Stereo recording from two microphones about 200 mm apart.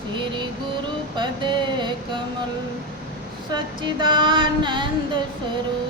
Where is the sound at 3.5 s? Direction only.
25° right (ahead or behind).